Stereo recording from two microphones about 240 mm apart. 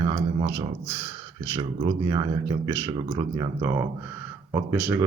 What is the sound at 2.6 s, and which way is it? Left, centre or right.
Speech, centre.